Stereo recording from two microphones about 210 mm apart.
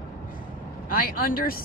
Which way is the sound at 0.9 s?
40° left (ahead or behind).